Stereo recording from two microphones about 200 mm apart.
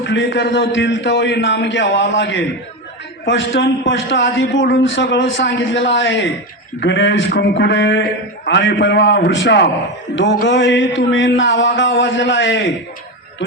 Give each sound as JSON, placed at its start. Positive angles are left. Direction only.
{"t": 0.0, "sound": "a man's voice", "side_deg": 65}